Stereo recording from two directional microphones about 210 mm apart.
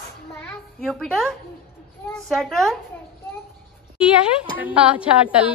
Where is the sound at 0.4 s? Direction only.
5° left (ahead or behind).